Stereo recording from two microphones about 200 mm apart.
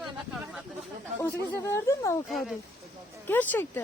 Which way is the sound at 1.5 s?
15° left (ahead or behind).